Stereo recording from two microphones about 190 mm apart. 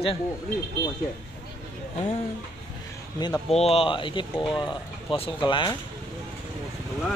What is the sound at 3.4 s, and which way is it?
Speech, 30° left (ahead or behind).